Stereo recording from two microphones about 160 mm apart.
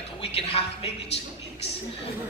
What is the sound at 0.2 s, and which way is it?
Speech, 35° left (ahead or behind).